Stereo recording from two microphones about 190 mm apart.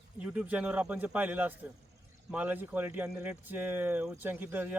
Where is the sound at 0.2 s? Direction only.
10° right (ahead or behind).